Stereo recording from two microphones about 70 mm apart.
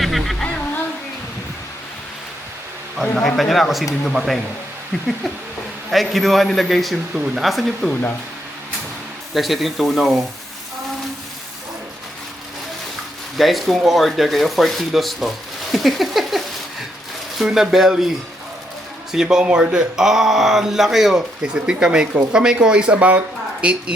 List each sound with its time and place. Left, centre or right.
0.0 s music: centre
3.2 s speech: centre
5.9 s speech: centre
9.3 s speech: centre
13.3 s speech: centre
19.1 s speech: centre
19.5 s speech: right
19.7 s speech: centre